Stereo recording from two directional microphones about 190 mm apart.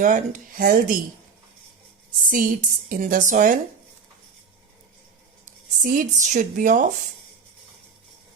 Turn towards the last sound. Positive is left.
turn(degrees=-40)  # may be behind; listen again after turning